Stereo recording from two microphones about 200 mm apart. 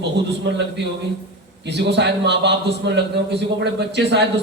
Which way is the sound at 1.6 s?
60° right (ahead or behind).